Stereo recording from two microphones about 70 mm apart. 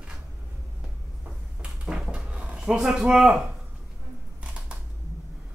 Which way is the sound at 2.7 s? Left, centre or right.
Centre.